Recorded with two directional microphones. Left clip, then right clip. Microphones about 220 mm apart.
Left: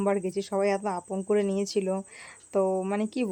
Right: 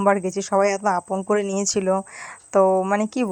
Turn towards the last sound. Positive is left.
turn(degrees=-20)  # may be behind; listen again after turning